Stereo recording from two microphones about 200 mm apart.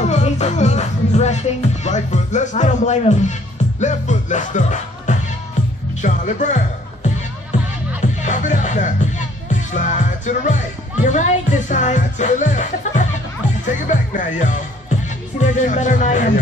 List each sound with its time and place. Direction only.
0.0 s music: 35° left (ahead or behind)
5.9 s speech: 40° left (ahead or behind)
8.2 s music: 40° left (ahead or behind)
9.5 s speech: 40° left (ahead or behind)